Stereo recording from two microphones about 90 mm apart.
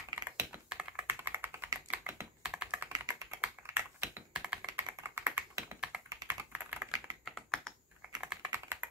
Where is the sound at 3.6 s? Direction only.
30° right (ahead or behind).